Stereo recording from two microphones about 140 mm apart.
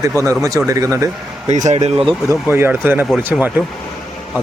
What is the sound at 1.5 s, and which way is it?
Speech, 55° right (ahead or behind).